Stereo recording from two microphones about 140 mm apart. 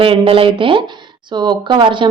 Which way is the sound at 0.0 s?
40° right (ahead or behind).